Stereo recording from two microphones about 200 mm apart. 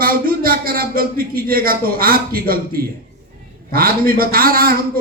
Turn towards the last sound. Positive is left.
turn(degrees=-50)  # may be behind; listen again after turning